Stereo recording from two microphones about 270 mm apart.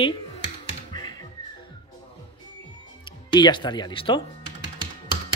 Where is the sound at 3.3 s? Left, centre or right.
Centre.